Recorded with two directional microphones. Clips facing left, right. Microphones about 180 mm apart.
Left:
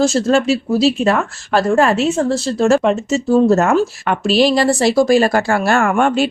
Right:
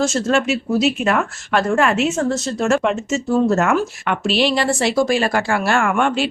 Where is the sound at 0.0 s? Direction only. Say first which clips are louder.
Left 4 dB; 35° left (ahead or behind).